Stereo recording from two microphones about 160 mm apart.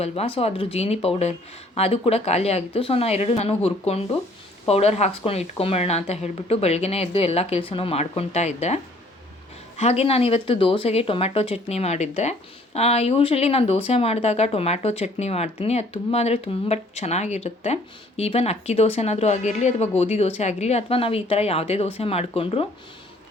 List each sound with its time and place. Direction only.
0.0 s speech: 40° left (ahead or behind)